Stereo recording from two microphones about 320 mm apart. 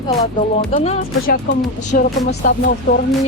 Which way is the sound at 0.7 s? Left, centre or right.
Centre.